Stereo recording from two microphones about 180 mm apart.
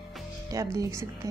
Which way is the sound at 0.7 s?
15° right (ahead or behind).